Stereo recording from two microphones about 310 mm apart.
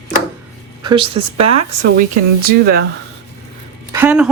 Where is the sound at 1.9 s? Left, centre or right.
Right.